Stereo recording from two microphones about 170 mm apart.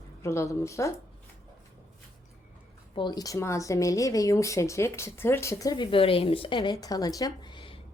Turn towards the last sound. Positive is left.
turn(degrees=30)  # may be behind; listen again after turning